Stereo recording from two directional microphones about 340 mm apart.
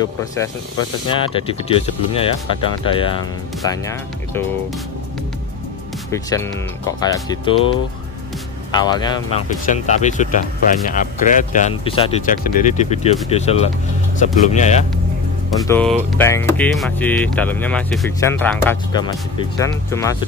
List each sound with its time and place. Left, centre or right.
0.0 s speech: centre
6.1 s speech: centre
8.7 s speech: centre
15.6 s speech: centre